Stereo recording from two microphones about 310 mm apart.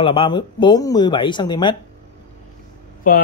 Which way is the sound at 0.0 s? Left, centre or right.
Centre.